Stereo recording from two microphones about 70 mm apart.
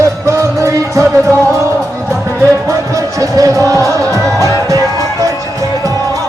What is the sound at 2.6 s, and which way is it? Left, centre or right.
Music, right.